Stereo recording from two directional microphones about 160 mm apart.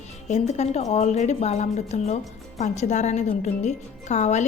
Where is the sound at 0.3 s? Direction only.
45° left (ahead or behind).